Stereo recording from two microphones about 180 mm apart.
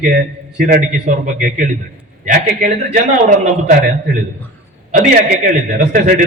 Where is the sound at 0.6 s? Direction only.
45° right (ahead or behind).